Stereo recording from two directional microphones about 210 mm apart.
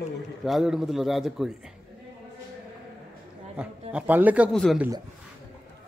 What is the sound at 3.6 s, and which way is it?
A man's voice, 5° right (ahead or behind).